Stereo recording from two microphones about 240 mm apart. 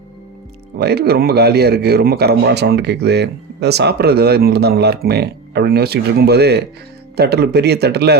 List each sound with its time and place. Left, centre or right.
0.8 s a man's voice: right